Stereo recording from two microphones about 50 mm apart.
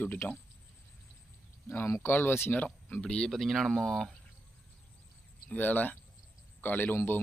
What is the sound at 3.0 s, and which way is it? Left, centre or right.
Speech, centre.